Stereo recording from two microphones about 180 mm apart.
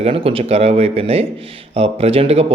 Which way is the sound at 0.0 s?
35° right (ahead or behind).